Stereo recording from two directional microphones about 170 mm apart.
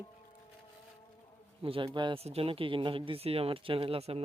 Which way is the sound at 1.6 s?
30° right (ahead or behind).